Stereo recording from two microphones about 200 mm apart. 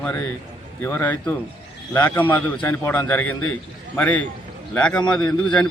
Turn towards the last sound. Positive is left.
turn(degrees=5)  # may be behind; listen again after turning